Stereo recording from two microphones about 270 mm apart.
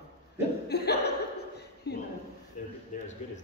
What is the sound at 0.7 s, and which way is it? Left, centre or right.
Speech, left.